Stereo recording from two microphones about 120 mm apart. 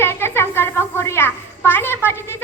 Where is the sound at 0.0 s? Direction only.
20° left (ahead or behind).